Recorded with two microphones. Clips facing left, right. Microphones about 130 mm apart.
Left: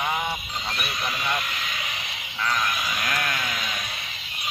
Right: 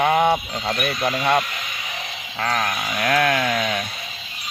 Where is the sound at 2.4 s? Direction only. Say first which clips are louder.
Right 4 dB; 65° right (ahead or behind).